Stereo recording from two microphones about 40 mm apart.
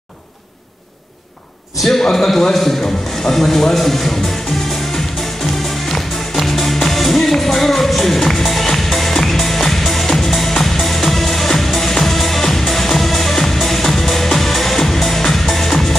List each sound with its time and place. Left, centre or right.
1.8 s a man's voice: centre
4.9 s music: centre